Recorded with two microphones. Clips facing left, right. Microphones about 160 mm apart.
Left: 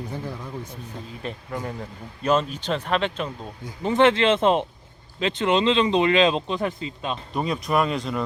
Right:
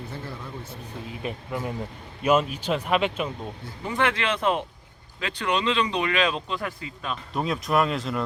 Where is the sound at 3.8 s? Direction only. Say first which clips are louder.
Left 7 dB; 25° left (ahead or behind).